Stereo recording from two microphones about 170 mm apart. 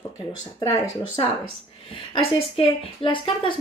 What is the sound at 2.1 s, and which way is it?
A woman's voice, 35° left (ahead or behind).